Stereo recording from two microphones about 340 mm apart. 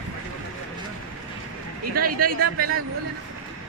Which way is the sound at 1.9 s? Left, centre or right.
Right.